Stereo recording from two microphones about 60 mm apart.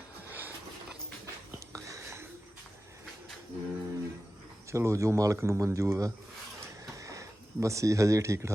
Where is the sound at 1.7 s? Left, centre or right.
Right.